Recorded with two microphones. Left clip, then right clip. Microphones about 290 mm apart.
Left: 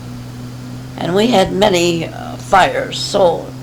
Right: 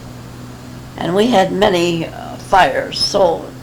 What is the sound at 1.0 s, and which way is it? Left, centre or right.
Speech, left.